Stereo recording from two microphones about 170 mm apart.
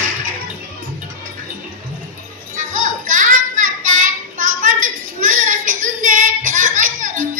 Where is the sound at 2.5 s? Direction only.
50° right (ahead or behind).